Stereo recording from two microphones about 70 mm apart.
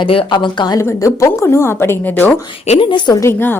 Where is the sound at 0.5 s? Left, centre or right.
Left.